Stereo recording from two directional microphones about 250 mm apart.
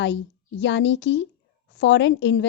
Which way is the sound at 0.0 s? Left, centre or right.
Left.